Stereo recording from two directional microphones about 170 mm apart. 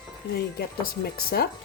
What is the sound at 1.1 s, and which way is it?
Music, 65° left (ahead or behind).